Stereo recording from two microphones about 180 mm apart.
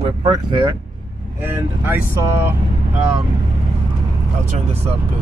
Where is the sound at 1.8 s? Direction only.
10° right (ahead or behind).